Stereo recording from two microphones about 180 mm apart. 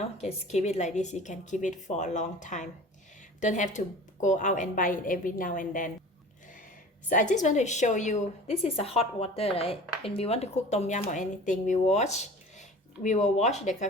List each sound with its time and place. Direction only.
0.2 s a woman's voice: 35° left (ahead or behind)
7.1 s a woman's voice: 45° left (ahead or behind)